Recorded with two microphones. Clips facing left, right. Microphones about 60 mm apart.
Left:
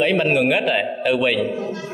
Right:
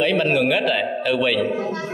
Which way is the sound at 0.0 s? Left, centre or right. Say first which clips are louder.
Left 1 dB; centre.